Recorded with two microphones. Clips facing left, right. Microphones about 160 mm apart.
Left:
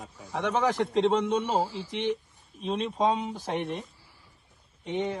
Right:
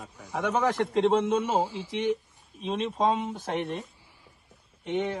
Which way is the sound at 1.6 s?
15° right (ahead or behind).